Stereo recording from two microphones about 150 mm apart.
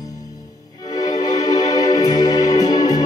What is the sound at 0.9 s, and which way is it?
Music, 30° left (ahead or behind).